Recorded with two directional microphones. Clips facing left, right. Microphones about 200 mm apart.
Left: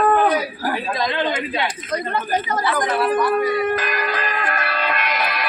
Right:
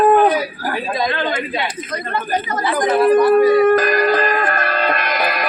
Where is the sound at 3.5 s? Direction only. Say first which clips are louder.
Right 9 dB; 45° right (ahead or behind).